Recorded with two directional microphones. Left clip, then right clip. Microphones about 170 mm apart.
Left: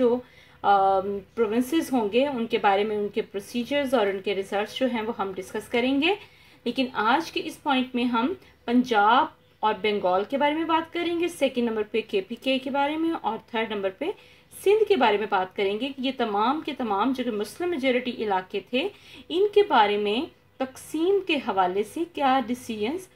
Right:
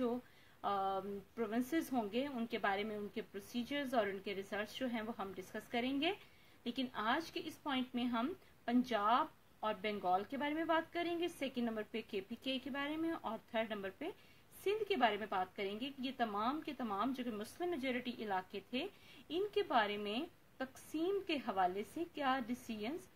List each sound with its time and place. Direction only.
0.6 s a woman's voice: 50° right (ahead or behind)